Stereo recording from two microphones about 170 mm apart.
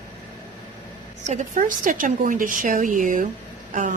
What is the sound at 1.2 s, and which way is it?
A woman's voice, 45° right (ahead or behind).